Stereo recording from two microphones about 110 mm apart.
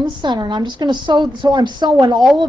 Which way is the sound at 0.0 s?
45° right (ahead or behind).